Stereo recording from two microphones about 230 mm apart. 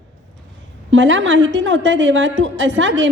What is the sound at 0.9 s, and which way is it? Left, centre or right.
A woman's voice, right.